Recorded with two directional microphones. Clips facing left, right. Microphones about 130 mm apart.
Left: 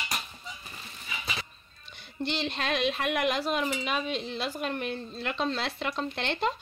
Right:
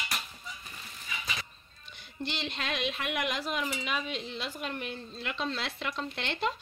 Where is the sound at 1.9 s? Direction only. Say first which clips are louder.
Left 5 dB; 30° left (ahead or behind).